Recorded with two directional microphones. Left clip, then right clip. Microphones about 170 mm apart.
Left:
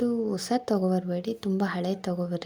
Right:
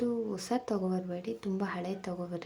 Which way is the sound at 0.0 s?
30° left (ahead or behind).